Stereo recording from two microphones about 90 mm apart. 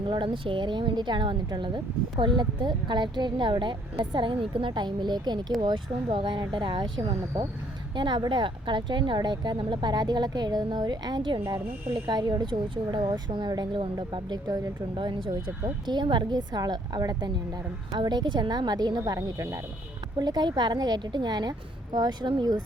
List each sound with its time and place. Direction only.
0.1 s speech: 65° right (ahead or behind)
12.7 s speech: 65° right (ahead or behind); by 14.7 s 45° right (ahead or behind)
14.9 s speech: 60° right (ahead or behind); by 19.5 s 40° right (ahead or behind)
20.1 s speech: 50° right (ahead or behind)